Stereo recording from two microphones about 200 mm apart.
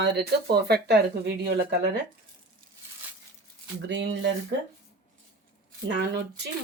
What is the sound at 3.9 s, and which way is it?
Speech, 65° right (ahead or behind).